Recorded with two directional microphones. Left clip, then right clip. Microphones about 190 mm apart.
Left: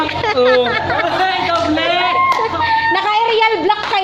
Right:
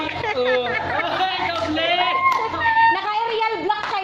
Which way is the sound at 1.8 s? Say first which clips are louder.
Left 1 dB; 55° left (ahead or behind).